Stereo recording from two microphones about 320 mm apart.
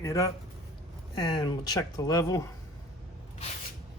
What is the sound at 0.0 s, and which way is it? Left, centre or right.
Speech, centre.